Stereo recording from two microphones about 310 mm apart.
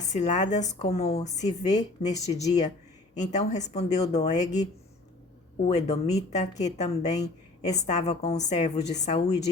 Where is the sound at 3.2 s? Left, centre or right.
Left.